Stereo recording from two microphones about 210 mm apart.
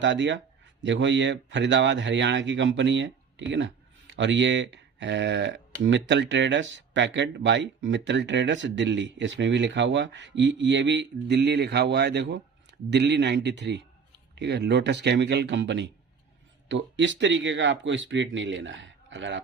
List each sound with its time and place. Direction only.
0.0 s speech: 60° right (ahead or behind)